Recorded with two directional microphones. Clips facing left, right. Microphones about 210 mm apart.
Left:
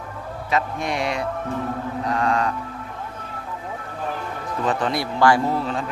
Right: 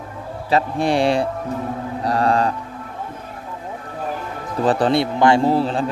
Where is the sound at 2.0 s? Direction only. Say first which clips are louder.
Right 4 dB; 35° right (ahead or behind).